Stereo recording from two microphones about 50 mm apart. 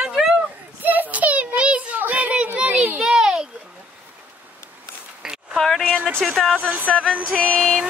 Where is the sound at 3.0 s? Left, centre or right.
Centre.